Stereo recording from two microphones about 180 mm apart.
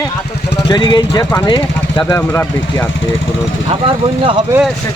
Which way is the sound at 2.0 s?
15° left (ahead or behind).